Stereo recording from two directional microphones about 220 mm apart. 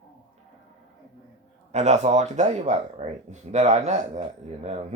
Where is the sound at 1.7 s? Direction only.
30° right (ahead or behind).